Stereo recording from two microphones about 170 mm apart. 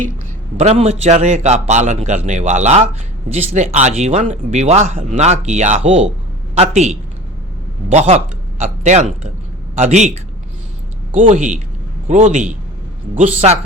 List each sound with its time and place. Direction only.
0.5 s a man's voice: 40° right (ahead or behind)
11.1 s a man's voice: 50° right (ahead or behind)